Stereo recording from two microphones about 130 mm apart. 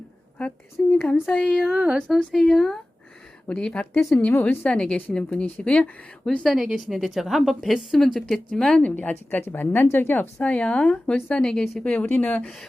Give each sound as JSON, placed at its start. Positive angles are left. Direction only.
{"t": 0.3, "sound": "a woman's voice", "side_deg": 10}
{"t": 6.4, "sound": "a woman's voice", "side_deg": 0}